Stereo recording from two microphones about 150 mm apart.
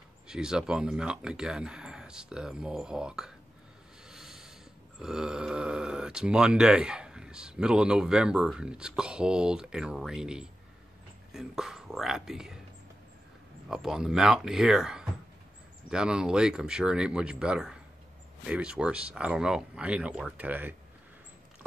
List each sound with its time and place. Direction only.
0.3 s speech: 5° right (ahead or behind)
4.1 s a sound: 5° right (ahead or behind)
4.9 s speech: 5° right (ahead or behind)
13.7 s speech: 5° right (ahead or behind)